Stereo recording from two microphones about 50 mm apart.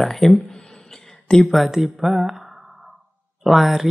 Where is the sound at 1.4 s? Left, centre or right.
Centre.